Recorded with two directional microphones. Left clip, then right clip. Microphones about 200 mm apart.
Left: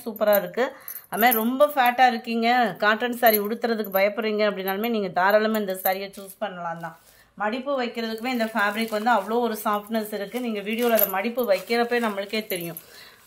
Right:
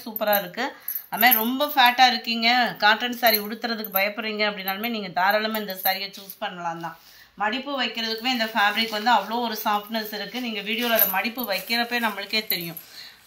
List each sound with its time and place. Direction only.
0.0 s speech: 60° left (ahead or behind)
7.3 s speech: 60° left (ahead or behind)